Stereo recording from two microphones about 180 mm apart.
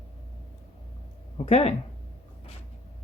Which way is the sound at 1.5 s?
35° left (ahead or behind).